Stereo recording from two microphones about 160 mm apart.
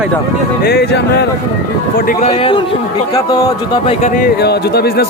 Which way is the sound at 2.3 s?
30° left (ahead or behind).